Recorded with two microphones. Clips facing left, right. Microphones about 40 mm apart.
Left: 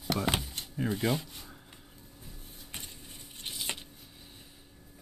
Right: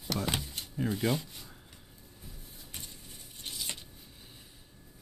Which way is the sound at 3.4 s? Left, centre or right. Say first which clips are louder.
Left 2 dB; left.